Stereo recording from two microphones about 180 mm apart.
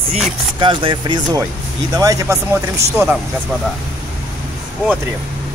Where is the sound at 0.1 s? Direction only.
25° right (ahead or behind); by 3.2 s 10° right (ahead or behind).